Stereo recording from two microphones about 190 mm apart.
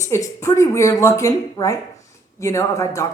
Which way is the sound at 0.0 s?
15° left (ahead or behind).